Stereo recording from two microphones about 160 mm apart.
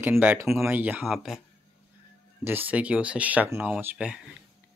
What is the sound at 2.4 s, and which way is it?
Speech, 10° right (ahead or behind).